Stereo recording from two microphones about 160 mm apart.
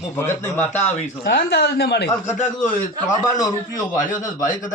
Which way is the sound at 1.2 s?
90° left.